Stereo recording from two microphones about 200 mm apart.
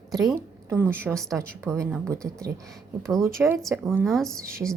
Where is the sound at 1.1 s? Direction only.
Centre (ahead or behind).